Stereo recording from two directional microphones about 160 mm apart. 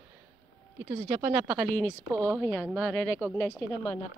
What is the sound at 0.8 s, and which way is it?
A woman's voice, 15° right (ahead or behind).